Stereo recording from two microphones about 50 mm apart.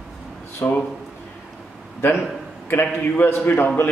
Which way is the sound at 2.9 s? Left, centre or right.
Left.